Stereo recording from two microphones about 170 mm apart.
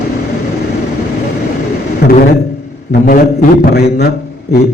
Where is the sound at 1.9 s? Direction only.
65° left (ahead or behind).